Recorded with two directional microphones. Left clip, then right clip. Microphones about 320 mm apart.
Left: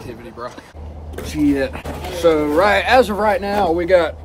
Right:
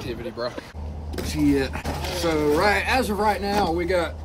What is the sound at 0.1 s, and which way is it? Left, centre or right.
Speech, centre.